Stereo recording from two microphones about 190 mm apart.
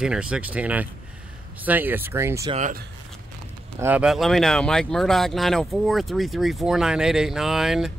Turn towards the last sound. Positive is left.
turn(degrees=0)  # may be behind; listen again after turning